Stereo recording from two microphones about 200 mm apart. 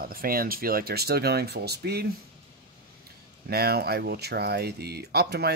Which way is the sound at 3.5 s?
50° right (ahead or behind).